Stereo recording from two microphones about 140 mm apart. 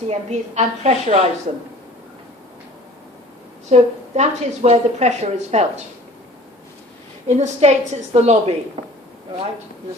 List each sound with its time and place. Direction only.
0.1 s a woman's voice: 55° right (ahead or behind)
3.7 s a woman's voice: 55° right (ahead or behind)
7.3 s a woman's voice: 55° right (ahead or behind)